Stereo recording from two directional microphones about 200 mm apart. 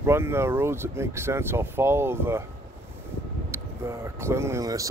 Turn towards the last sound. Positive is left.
turn(degrees=-15)  # may be behind; listen again after turning